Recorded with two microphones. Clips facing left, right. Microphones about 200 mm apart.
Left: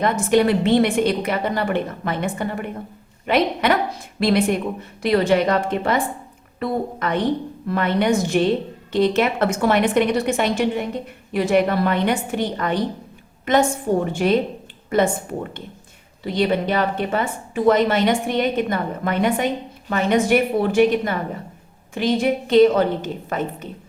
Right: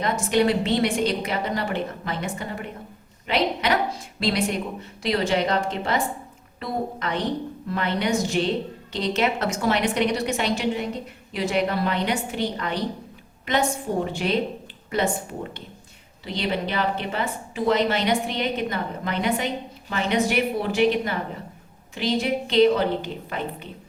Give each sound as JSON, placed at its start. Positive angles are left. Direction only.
{"t": 0.0, "sound": "a woman's voice", "side_deg": 55}